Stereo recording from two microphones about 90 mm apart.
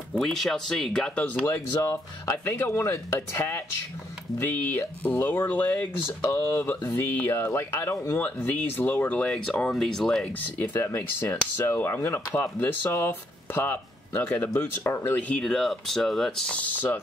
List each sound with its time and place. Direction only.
0.2 s speech: 5° left (ahead or behind)
1.4 s speech: 35° left (ahead or behind); by 9.3 s 20° left (ahead or behind)
9.6 s speech: 5° left (ahead or behind)
10.4 s speech: 25° left (ahead or behind)